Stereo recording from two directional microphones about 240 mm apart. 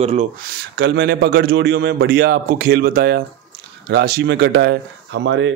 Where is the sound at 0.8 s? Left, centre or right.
Right.